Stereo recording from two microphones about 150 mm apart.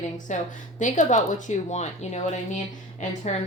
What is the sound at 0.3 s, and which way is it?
Speech, 55° left (ahead or behind).